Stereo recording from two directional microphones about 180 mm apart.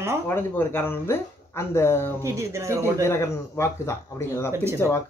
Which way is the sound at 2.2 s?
15° right (ahead or behind).